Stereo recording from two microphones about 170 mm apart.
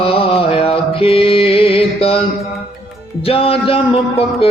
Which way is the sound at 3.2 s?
35° left (ahead or behind).